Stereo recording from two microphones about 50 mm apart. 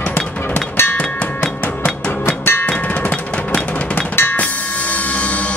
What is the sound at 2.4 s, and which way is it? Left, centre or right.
Drum, left.